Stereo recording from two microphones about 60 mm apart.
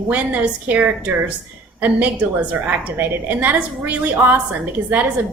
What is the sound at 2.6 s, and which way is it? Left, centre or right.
A woman's voice, right.